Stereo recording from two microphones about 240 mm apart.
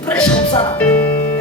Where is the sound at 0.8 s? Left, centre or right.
Centre.